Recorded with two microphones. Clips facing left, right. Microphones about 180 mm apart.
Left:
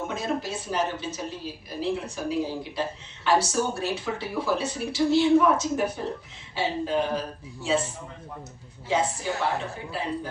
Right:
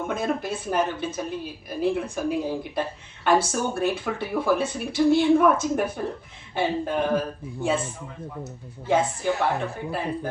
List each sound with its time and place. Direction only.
0.1 s speech: 55° right (ahead or behind)
8.9 s speech: 55° right (ahead or behind)